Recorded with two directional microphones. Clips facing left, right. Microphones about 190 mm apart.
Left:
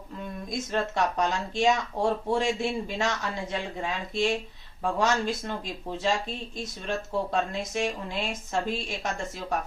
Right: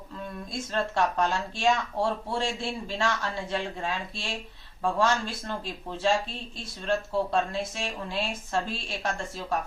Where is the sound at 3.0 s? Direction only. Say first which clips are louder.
Even; 15° left (ahead or behind).